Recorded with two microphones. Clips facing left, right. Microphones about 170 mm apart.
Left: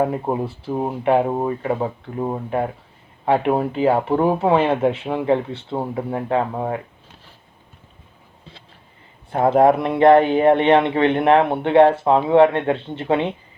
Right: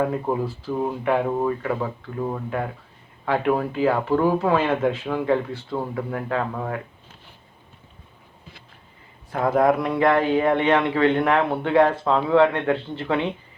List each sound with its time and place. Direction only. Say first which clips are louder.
0.0 s a man's voice: left 2 dB; 25° left (ahead or behind)
9.3 s a man's voice: left 4 dB; 30° left (ahead or behind)